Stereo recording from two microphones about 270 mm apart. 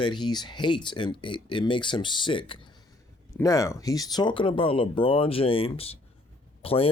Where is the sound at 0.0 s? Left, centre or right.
Centre.